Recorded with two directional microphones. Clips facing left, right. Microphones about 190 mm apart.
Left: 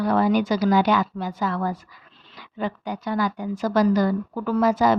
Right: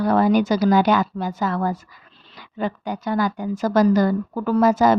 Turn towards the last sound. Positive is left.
turn(degrees=-45)  # may be behind; listen again after turning